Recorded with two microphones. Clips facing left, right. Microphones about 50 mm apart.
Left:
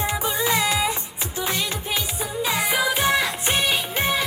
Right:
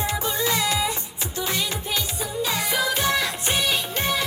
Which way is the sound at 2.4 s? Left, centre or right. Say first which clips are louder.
Left 2 dB; centre.